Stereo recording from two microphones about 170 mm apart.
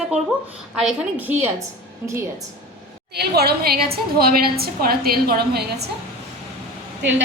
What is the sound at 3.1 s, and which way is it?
A woman's voice, 70° right (ahead or behind).